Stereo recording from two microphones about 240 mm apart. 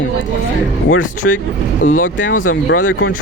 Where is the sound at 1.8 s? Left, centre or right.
Left.